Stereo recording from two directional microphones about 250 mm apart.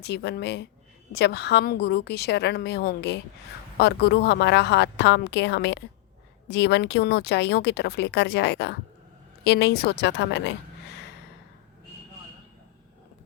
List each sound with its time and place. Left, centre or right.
0.0 s a woman's voice: left